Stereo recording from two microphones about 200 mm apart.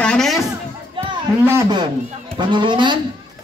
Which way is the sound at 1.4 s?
15° right (ahead or behind).